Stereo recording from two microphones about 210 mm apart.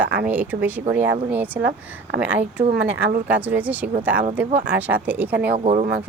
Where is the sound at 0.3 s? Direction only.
10° right (ahead or behind).